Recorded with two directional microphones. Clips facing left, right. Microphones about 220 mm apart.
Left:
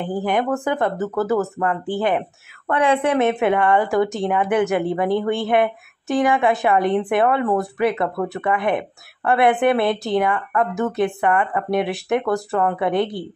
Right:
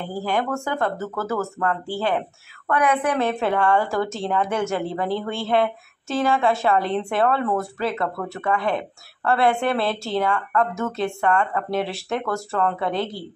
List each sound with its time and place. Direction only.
0.0 s a woman's voice: 20° left (ahead or behind)